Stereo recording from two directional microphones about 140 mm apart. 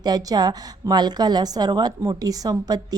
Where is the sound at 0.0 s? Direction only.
25° right (ahead or behind).